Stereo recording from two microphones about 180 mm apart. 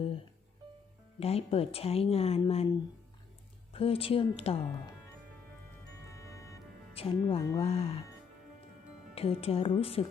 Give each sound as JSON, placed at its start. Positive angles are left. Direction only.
{"t": 1.2, "sound": "a woman's voice", "side_deg": 35}
{"t": 6.1, "sound": "music", "side_deg": 15}
{"t": 6.9, "sound": "a woman's voice", "side_deg": 30}
{"t": 9.1, "sound": "a woman's voice", "side_deg": 35}